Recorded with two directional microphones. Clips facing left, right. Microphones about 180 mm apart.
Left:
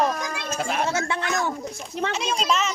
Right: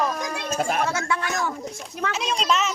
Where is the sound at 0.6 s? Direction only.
45° right (ahead or behind).